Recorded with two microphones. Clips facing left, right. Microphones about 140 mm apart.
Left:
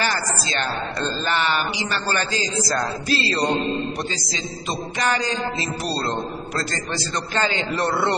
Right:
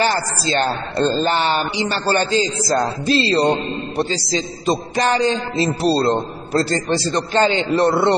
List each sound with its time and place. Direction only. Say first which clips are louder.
0.0 s a man's voice: right 5 dB; 30° right (ahead or behind)